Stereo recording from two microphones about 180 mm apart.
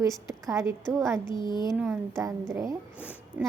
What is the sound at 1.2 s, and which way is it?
Speech, 25° left (ahead or behind).